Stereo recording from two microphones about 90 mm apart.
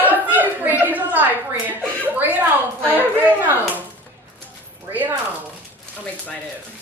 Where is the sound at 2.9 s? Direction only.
20° right (ahead or behind).